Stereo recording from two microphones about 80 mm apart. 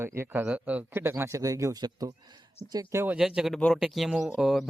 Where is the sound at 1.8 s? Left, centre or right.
Right.